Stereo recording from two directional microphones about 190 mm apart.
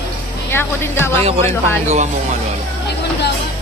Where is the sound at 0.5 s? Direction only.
10° left (ahead or behind).